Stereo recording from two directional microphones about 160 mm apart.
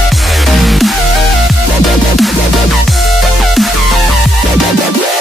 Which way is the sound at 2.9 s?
Centre (ahead or behind).